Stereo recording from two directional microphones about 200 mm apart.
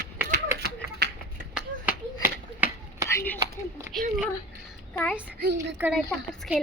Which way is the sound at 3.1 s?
15° left (ahead or behind).